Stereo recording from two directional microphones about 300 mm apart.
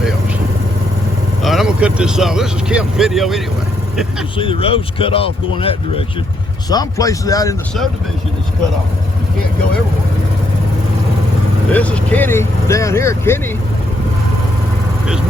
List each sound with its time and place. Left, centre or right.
1.4 s speech: centre
4.4 s speech: centre
11.7 s speech: centre